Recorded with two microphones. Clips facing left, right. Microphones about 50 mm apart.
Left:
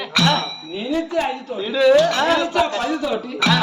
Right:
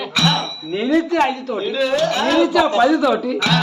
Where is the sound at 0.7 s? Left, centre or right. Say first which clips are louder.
Right 7 dB; right.